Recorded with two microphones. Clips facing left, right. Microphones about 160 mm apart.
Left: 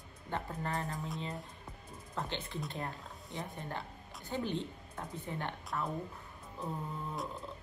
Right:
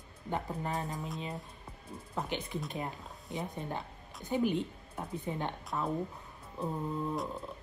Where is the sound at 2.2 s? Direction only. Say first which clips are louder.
Right 3 dB; 15° right (ahead or behind).